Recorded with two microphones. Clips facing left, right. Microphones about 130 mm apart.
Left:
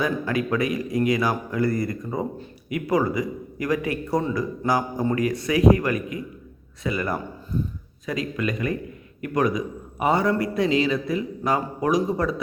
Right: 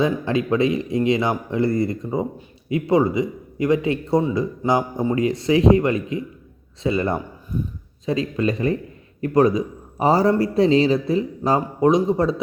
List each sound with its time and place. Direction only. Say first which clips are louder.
0.0 s a man's voice: right 4 dB; 25° right (ahead or behind)